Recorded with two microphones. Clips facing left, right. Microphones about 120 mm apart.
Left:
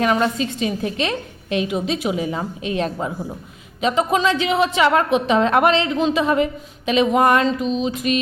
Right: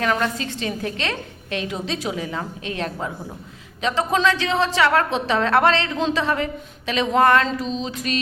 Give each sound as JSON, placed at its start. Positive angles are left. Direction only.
{"t": 0.0, "sound": "a woman's voice", "side_deg": 20}